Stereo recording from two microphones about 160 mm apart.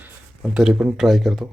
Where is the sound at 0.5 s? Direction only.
5° right (ahead or behind).